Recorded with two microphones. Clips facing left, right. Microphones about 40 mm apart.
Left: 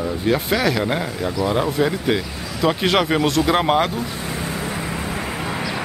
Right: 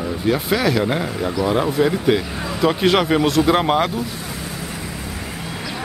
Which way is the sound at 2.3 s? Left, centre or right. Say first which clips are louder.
Right 4 dB; right.